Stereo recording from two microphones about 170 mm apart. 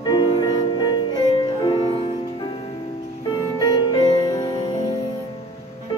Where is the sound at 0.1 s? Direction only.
25° left (ahead or behind).